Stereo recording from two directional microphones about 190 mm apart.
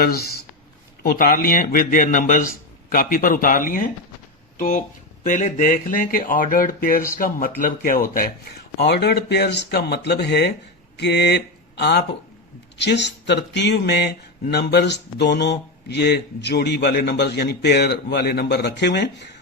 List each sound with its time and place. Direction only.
0.0 s a man's voice: 55° left (ahead or behind)
8.8 s speech: 60° left (ahead or behind)